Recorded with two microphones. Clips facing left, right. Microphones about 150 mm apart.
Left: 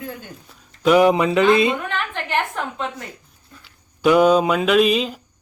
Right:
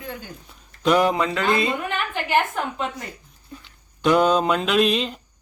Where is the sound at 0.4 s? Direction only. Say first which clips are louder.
Left 3 dB; 5° left (ahead or behind).